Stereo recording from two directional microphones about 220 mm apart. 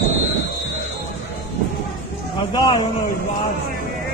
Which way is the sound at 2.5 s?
20° left (ahead or behind).